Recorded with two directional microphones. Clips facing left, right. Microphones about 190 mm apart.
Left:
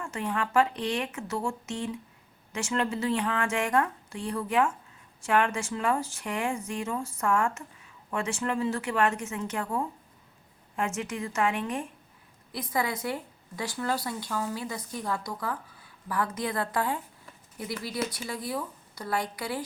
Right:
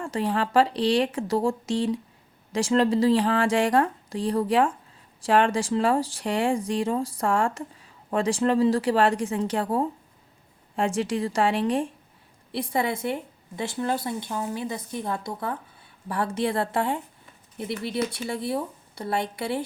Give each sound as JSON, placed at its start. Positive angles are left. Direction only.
{"t": 0.0, "sound": "speech", "side_deg": -35}